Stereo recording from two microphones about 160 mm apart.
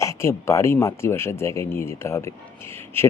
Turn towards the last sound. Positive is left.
turn(degrees=15)  # may be behind; listen again after turning